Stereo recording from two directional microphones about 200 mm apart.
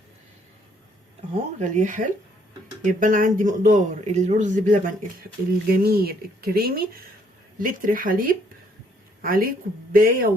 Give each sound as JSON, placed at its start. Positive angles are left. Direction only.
{"t": 1.5, "sound": "speech", "side_deg": -35}